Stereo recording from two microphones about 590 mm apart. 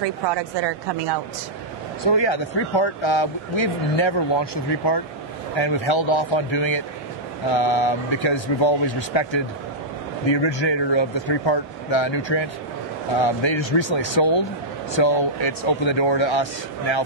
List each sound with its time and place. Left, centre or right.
0.0 s a woman's voice: right
2.0 s speech: left